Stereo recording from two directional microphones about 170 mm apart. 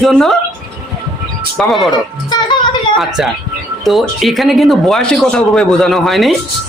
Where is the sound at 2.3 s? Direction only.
25° left (ahead or behind).